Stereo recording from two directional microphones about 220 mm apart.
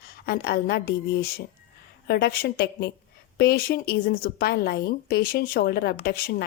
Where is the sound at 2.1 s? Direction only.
45° left (ahead or behind).